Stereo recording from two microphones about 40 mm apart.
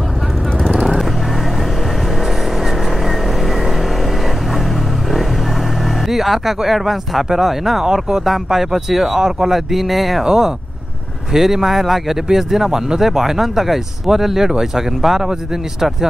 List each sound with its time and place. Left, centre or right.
0.7 s vehicle: centre
6.0 s speech: centre
10.2 s a man's voice: centre